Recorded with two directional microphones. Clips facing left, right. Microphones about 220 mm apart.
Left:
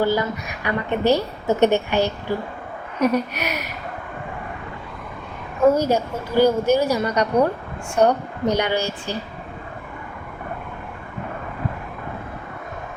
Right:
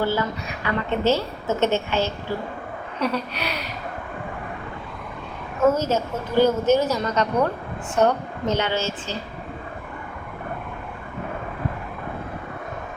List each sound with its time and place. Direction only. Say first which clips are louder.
0.0 s a woman's voice: left 3 dB; 15° left (ahead or behind)
5.7 s a woman's voice: left 3 dB; 15° left (ahead or behind)